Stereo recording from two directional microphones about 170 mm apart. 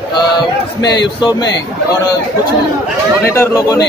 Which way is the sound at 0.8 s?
25° left (ahead or behind).